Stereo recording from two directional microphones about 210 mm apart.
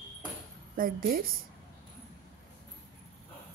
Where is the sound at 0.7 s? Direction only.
45° right (ahead or behind).